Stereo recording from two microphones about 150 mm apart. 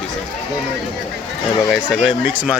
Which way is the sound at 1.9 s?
5° right (ahead or behind).